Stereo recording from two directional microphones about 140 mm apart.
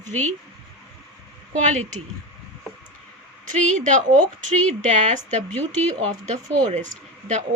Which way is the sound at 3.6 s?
60° right (ahead or behind).